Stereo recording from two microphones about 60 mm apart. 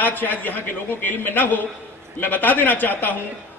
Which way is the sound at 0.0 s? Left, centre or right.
Left.